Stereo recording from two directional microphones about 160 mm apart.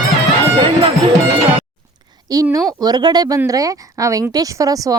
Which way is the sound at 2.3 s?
20° right (ahead or behind).